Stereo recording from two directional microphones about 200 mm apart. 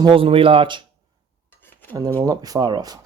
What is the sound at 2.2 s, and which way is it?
Speech, 20° right (ahead or behind).